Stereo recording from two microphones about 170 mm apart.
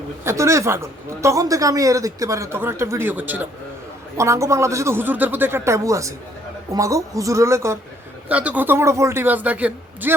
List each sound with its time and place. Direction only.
0.3 s a woman's voice: 15° right (ahead or behind)